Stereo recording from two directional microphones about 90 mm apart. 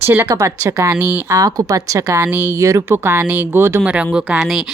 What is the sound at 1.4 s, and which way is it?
Speech, 40° right (ahead or behind).